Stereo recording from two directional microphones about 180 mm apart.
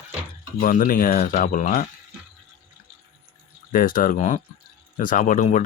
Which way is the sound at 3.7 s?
50° left (ahead or behind).